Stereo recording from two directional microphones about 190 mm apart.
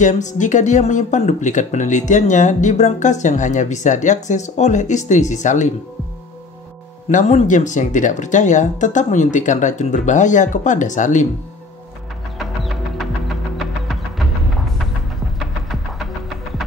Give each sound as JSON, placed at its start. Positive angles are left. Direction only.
{"t": 0.0, "sound": "speech", "side_deg": 40}
{"t": 7.1, "sound": "speech", "side_deg": 40}
{"t": 12.4, "sound": "a sound", "side_deg": 0}
{"t": 13.6, "sound": "music", "side_deg": 0}